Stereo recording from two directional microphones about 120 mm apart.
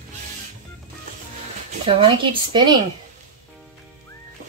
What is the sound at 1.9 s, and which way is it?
Speech, 45° right (ahead or behind).